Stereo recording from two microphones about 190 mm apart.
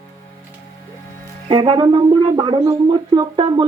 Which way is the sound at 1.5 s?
25° right (ahead or behind).